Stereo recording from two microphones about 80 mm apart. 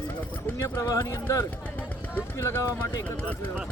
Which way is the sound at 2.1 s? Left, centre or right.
Left.